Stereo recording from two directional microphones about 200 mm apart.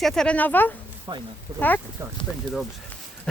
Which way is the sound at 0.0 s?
5° left (ahead or behind).